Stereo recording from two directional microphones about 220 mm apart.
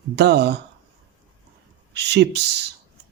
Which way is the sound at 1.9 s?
50° right (ahead or behind).